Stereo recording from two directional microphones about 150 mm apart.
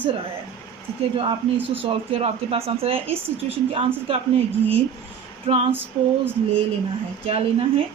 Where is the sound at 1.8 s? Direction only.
40° right (ahead or behind).